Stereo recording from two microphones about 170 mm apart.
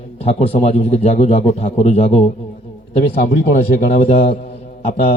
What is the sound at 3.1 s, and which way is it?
Speech, 55° left (ahead or behind).